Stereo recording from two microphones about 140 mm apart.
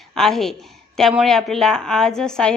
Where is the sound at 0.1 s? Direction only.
Centre (ahead or behind).